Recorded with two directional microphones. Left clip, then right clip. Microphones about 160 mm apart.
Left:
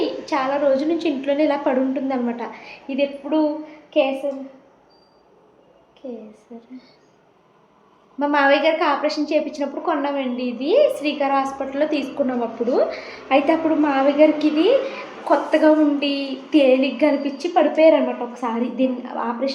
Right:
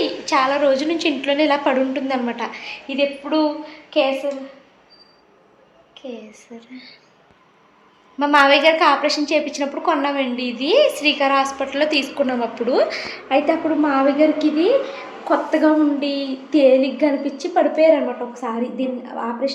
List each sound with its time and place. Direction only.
0.3 s a woman's voice: 10° right (ahead or behind)
5.9 s a woman's voice: 5° left (ahead or behind)
8.2 s a woman's voice: 5° right (ahead or behind)
17.7 s a woman's voice: 20° left (ahead or behind)